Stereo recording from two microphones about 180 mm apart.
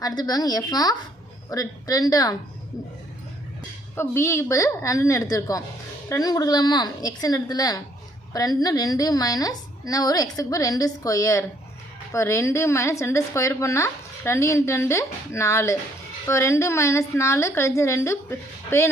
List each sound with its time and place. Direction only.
0.2 s a woman's voice: 20° left (ahead or behind)
3.9 s a woman's voice: 15° left (ahead or behind)